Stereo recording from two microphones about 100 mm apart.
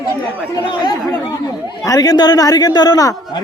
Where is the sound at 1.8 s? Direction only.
35° left (ahead or behind).